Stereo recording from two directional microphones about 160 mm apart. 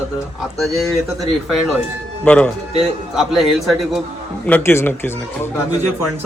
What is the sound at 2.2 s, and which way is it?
A man's voice, 10° left (ahead or behind).